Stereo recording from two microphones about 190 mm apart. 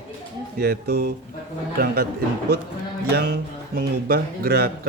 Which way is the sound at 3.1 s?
55° right (ahead or behind).